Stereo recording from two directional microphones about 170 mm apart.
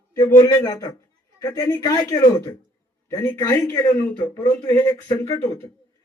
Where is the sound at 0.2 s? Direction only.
20° left (ahead or behind).